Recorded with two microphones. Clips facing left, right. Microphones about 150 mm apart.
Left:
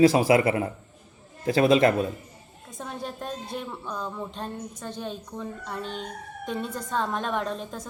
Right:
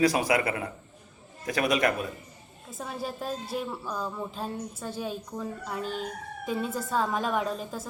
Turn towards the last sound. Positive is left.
turn(degrees=-5)  # may be behind; listen again after turning